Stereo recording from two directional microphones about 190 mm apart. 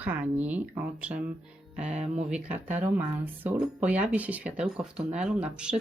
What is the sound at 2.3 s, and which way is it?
Speech, 10° right (ahead or behind).